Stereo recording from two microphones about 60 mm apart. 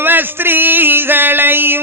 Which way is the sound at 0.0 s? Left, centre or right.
Right.